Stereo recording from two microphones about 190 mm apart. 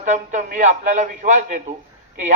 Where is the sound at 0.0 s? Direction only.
40° right (ahead or behind).